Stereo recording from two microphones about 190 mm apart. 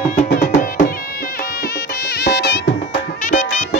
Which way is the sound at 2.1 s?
60° left (ahead or behind).